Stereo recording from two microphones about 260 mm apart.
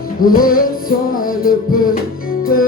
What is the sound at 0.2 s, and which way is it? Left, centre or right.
Music, left.